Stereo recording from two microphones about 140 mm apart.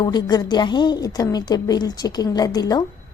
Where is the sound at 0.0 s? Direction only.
30° left (ahead or behind).